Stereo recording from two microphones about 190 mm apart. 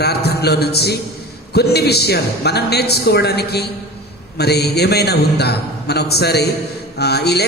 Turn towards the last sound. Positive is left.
turn(degrees=60)  # may be behind; listen again after turning